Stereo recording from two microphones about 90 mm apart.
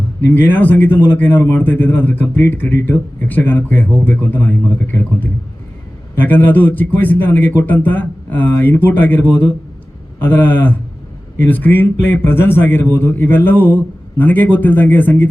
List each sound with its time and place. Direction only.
0.3 s a man's voice: 20° left (ahead or behind)